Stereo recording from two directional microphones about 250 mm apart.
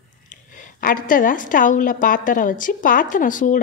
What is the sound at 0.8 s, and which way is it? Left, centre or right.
A woman's voice, left.